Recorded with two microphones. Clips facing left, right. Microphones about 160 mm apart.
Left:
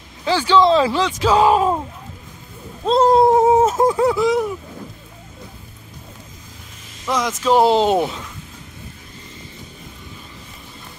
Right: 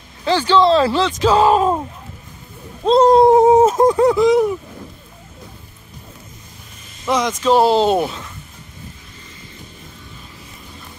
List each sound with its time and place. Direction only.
0.2 s speech: 10° left (ahead or behind)
2.9 s speech: 5° left (ahead or behind)
7.1 s speech: 5° left (ahead or behind)